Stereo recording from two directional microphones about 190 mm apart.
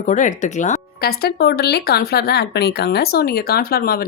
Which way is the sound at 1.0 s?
55° left (ahead or behind).